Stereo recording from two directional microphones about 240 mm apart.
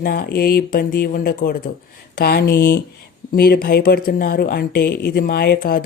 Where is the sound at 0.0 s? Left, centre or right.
Left.